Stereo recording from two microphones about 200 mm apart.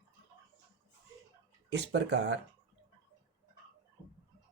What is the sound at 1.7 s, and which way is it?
Speech, 60° right (ahead or behind).